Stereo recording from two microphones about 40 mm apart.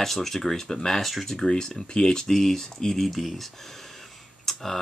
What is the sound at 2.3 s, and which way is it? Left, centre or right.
Speech, centre.